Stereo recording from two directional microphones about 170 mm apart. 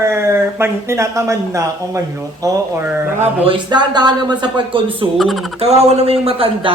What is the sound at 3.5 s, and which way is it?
Speech, 25° right (ahead or behind).